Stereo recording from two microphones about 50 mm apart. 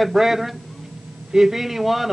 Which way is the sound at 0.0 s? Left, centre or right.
Centre.